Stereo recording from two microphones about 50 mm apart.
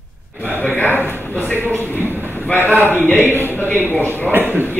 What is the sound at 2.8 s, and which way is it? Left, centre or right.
A man's voice, left.